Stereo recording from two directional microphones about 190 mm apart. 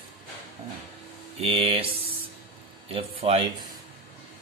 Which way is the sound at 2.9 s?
30° right (ahead or behind).